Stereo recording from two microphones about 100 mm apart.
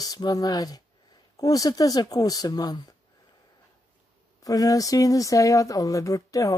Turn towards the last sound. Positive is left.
turn(degrees=35)  # may be behind; listen again after turning